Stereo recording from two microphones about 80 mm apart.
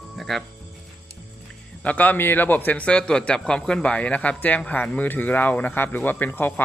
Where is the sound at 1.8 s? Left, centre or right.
Centre.